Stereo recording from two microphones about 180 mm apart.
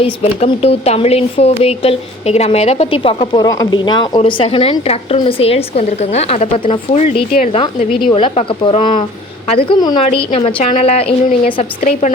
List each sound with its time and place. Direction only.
0.0 s a woman's voice: 35° left (ahead or behind)